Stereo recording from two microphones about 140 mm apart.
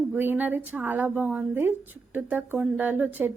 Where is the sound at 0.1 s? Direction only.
15° right (ahead or behind).